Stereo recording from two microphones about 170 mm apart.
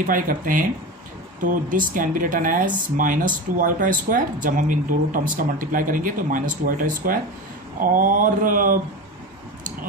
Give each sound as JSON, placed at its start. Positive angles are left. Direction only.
{"t": 0.0, "sound": "speech", "side_deg": -55}